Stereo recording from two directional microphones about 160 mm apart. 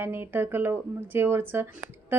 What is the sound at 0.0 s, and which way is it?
Speech, 15° right (ahead or behind).